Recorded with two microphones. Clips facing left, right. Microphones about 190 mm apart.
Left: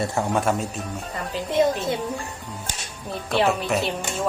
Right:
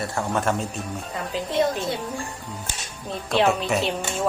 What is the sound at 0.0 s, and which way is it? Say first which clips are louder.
Speech: left 2 dB; 20° left (ahead or behind).